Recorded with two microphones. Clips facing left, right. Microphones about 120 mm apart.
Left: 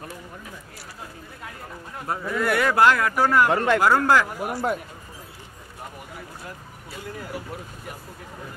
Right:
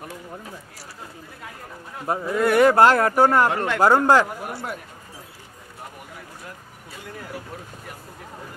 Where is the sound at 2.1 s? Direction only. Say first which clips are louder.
Right 4 dB; 25° right (ahead or behind).